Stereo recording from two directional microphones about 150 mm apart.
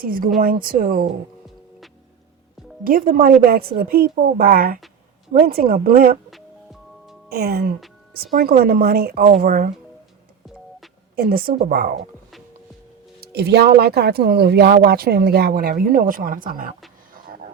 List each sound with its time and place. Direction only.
0.0 s speech: 70° right (ahead or behind)
2.8 s speech: 70° right (ahead or behind)
7.3 s speech: 90° right; by 9.6 s 75° right (ahead or behind)
11.1 s speech: 85° right
13.1 s speech: 90° right; by 16.7 s 65° right (ahead or behind)